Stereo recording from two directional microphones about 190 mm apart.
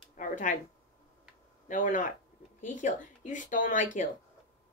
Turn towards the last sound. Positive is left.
turn(degrees=45)  # may be behind; listen again after turning